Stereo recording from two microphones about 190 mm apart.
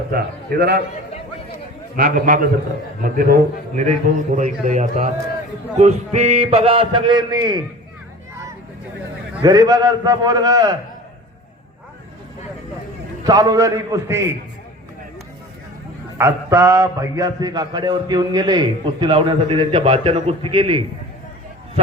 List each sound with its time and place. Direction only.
0.1 s a man's voice: 55° right (ahead or behind)
2.0 s a man's voice: 45° right (ahead or behind); by 7.6 s 20° right (ahead or behind)
9.4 s a man's voice: 20° right (ahead or behind)
13.2 s a man's voice: 20° right (ahead or behind)
16.1 s a man's voice: 15° right (ahead or behind)